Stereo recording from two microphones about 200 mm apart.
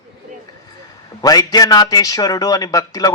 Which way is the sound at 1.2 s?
20° left (ahead or behind).